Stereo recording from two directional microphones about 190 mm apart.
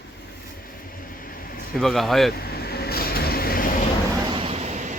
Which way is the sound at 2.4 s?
55° left (ahead or behind).